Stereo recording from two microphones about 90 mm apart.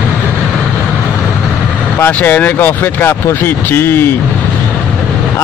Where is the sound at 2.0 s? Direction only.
20° left (ahead or behind).